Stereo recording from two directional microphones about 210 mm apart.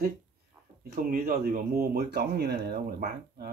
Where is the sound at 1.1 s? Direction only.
45° right (ahead or behind).